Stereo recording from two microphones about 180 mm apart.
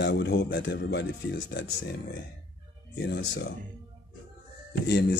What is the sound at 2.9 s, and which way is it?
Speech, 65° left (ahead or behind).